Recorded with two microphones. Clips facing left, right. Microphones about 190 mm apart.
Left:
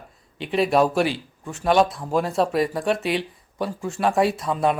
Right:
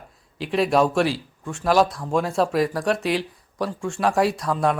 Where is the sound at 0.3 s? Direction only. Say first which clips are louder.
Even; centre (ahead or behind).